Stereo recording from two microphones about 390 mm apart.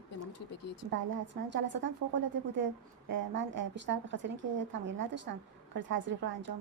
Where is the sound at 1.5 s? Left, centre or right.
Right.